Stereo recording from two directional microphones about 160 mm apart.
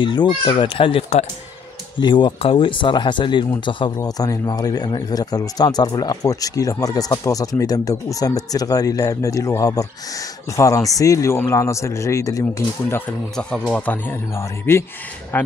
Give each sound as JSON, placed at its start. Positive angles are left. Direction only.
{"t": 0.0, "sound": "a man's voice", "side_deg": 30}
{"t": 13.4, "sound": "speech", "side_deg": 5}